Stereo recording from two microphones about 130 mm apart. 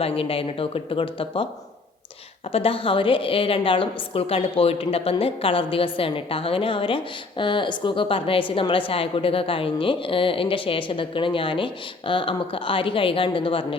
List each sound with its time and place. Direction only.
0.0 s a woman's voice: 45° left (ahead or behind)
2.5 s a woman's voice: 45° left (ahead or behind)